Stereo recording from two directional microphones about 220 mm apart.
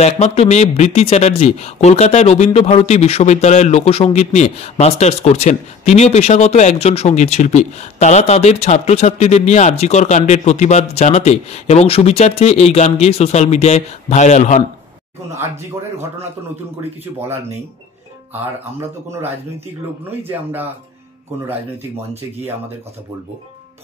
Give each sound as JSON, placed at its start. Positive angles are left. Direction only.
{"t": 0.0, "sound": "speech", "side_deg": 30}
{"t": 17.0, "sound": "speech", "side_deg": -10}
{"t": 18.8, "sound": "speech", "side_deg": -10}